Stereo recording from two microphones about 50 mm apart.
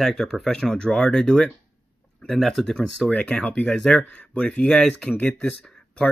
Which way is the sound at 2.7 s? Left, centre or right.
Centre.